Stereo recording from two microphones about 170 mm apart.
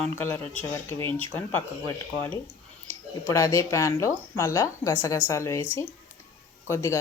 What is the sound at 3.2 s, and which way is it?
Speech, 15° left (ahead or behind).